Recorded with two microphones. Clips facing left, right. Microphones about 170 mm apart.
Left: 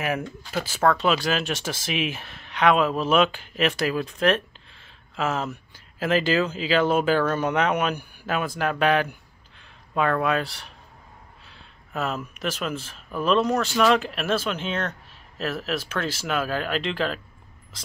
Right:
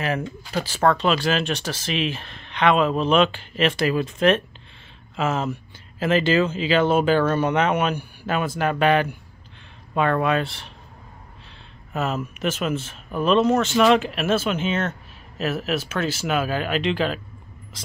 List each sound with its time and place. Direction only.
0.4 s speech: centre (ahead or behind)
7.9 s speech: 45° left (ahead or behind)
8.3 s speech: centre (ahead or behind)
11.9 s speech: centre (ahead or behind)